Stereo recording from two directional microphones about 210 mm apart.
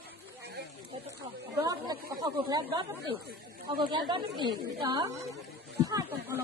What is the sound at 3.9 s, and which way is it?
Speech, 20° right (ahead or behind).